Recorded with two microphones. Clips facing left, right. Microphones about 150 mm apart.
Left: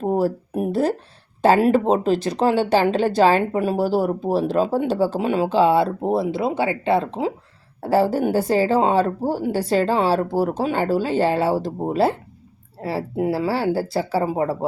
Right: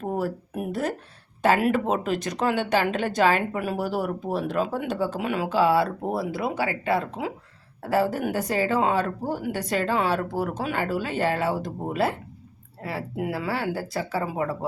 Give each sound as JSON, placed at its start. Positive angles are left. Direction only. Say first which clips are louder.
{"t": 0.0, "sound": "a woman's voice", "louder": "left 7 dB", "side_deg": 30}